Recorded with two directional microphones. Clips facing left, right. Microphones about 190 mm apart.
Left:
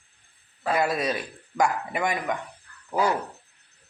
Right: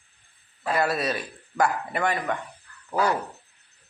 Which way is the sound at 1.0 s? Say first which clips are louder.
Even; 10° left (ahead or behind).